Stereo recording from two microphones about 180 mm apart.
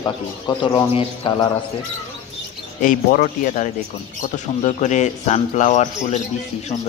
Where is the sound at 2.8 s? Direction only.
50° left (ahead or behind).